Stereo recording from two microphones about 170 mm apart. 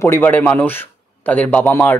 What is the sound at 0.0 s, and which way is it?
Speech, 10° left (ahead or behind).